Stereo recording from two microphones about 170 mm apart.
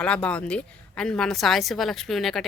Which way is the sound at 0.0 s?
5° left (ahead or behind).